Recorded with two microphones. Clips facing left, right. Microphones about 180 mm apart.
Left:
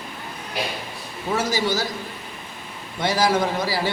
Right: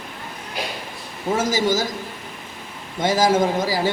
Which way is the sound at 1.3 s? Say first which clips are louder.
Right 3 dB; 45° right (ahead or behind).